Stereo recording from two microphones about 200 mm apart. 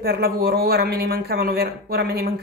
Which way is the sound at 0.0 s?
50° right (ahead or behind).